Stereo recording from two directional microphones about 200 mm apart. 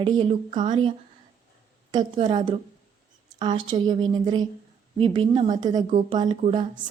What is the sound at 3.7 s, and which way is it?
Speech, 25° right (ahead or behind).